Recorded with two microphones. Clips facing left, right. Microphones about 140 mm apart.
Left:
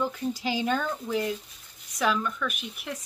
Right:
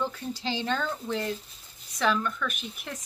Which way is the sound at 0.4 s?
10° left (ahead or behind).